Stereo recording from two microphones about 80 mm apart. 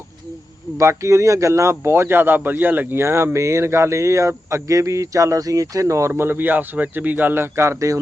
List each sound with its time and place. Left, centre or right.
0.8 s speech: right